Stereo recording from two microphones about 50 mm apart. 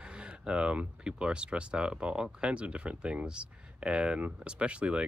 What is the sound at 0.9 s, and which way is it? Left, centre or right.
Speech, centre.